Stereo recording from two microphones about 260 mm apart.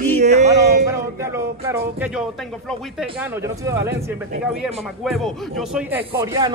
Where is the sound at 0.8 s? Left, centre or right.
Centre.